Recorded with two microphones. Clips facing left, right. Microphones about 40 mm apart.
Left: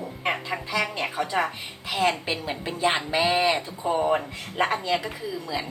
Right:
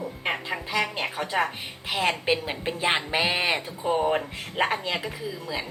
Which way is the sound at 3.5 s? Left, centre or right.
Centre.